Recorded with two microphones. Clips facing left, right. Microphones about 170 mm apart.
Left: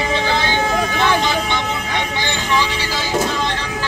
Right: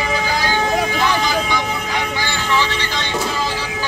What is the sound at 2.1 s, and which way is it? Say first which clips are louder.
Vehicle: left 1 dB; 20° left (ahead or behind).